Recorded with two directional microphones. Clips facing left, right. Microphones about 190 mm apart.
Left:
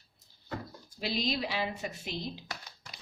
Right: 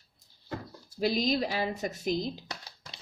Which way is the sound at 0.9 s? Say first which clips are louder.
Right 6 dB; 45° right (ahead or behind).